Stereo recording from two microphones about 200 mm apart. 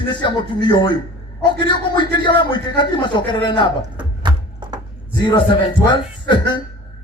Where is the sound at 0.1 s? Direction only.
20° left (ahead or behind).